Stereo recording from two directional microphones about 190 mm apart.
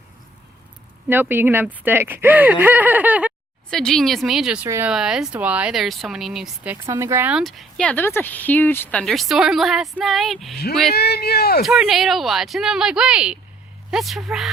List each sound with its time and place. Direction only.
1.0 s speech: 10° right (ahead or behind)
3.7 s speech: centre (ahead or behind)
6.8 s speech: 15° right (ahead or behind); by 10.6 s centre (ahead or behind)
10.9 s speech: 55° left (ahead or behind)
11.6 s speech: 5° right (ahead or behind)